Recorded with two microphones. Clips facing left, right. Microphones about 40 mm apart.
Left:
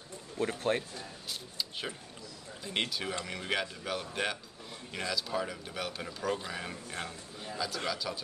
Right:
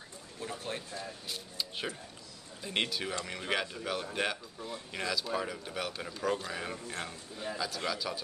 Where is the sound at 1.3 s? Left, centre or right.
Centre.